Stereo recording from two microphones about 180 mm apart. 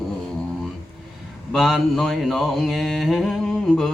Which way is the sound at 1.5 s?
Centre (ahead or behind).